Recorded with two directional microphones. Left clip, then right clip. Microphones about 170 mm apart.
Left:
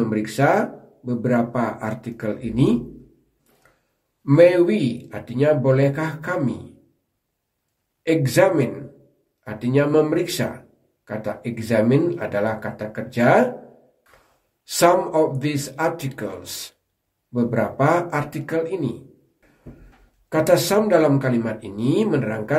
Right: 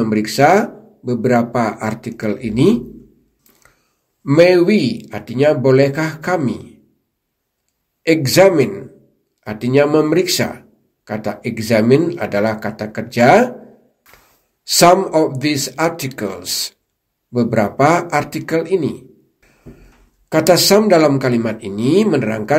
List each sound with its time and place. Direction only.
0.0 s speech: 35° right (ahead or behind)
4.2 s speech: 30° right (ahead or behind)
8.0 s speech: 35° right (ahead or behind)
14.6 s speech: 35° right (ahead or behind)
20.2 s speech: 35° right (ahead or behind)